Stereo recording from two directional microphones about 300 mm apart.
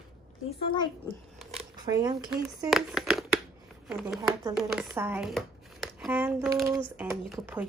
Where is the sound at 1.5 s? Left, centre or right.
Centre.